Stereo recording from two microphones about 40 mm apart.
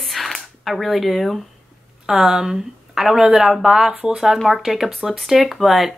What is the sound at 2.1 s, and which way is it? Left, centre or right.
Speech, centre.